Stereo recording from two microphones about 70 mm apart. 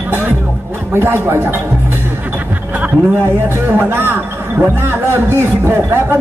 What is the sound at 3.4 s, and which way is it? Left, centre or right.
A man's voice, right.